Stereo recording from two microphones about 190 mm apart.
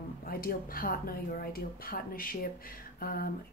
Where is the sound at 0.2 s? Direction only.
50° left (ahead or behind).